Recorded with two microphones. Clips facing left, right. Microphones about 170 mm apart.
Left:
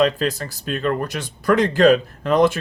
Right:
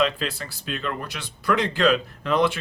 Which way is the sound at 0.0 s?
45° left (ahead or behind).